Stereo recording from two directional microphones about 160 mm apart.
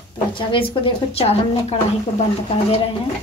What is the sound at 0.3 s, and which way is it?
A woman's voice, 30° left (ahead or behind).